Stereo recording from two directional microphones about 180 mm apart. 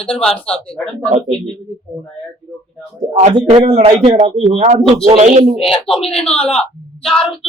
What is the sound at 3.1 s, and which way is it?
Speech, 40° right (ahead or behind).